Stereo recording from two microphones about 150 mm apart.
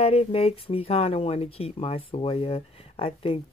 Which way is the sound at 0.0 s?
40° left (ahead or behind).